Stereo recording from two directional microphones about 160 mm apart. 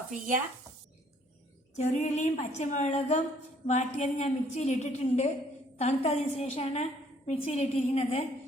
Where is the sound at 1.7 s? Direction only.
45° left (ahead or behind).